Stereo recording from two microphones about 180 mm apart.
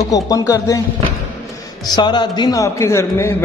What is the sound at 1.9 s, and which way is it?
A man's voice, 25° left (ahead or behind).